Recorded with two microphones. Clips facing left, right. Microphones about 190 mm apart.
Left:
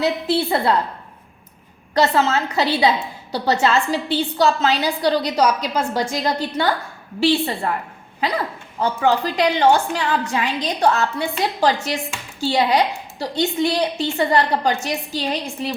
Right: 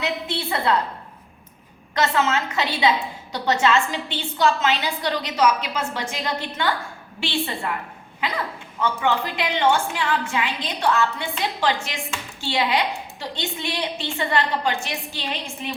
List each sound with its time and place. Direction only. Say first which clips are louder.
2.0 s a woman's voice: left 4 dB; 35° left (ahead or behind)